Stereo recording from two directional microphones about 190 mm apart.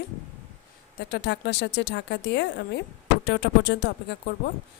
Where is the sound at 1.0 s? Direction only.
60° left (ahead or behind).